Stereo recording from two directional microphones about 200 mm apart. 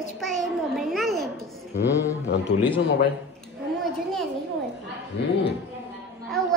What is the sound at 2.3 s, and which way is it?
Speech, 60° left (ahead or behind).